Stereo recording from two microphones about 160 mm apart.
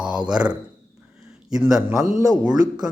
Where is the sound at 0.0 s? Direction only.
5° right (ahead or behind).